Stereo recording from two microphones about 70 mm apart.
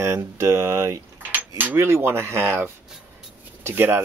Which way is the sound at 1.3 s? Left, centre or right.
Right.